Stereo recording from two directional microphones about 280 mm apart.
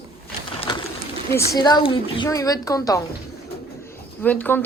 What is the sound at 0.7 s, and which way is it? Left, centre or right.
Pigeon, centre.